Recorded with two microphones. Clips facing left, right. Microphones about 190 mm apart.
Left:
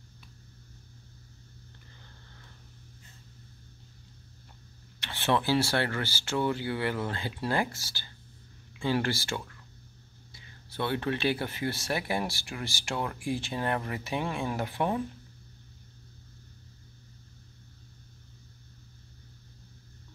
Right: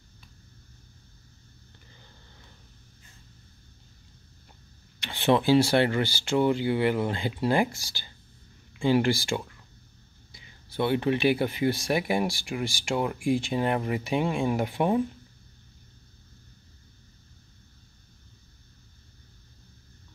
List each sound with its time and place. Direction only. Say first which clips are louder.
5.0 s speech: right 5 dB; 15° right (ahead or behind)